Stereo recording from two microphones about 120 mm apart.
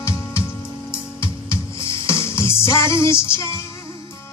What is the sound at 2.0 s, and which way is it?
Music, 20° left (ahead or behind).